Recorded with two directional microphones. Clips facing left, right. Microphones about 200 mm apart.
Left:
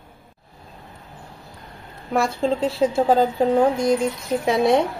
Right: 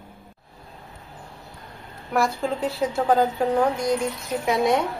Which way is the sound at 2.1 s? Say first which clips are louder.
Left 3 dB; 25° left (ahead or behind).